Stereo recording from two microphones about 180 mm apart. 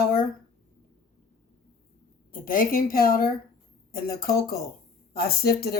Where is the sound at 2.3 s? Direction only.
50° left (ahead or behind).